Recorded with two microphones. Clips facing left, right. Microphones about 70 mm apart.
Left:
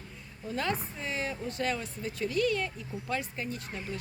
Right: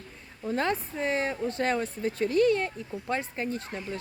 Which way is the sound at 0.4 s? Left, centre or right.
Right.